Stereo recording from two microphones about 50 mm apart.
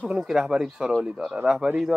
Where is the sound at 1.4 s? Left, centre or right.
Centre.